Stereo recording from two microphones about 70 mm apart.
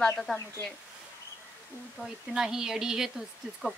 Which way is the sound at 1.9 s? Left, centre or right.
Centre.